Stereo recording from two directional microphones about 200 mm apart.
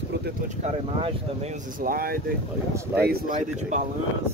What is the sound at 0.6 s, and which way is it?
Speech, 35° right (ahead or behind).